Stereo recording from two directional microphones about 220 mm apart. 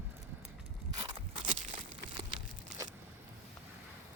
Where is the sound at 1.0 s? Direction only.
25° right (ahead or behind).